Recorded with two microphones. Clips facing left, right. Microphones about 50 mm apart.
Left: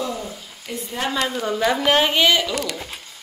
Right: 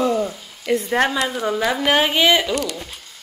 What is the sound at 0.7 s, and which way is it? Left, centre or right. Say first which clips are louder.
Speech: right 11 dB; right.